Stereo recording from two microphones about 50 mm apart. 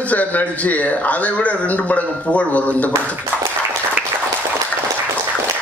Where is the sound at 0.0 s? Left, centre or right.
Left.